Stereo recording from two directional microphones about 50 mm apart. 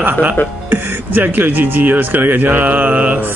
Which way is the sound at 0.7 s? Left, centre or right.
Right.